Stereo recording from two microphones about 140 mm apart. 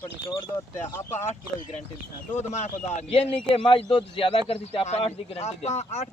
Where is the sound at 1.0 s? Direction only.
15° left (ahead or behind).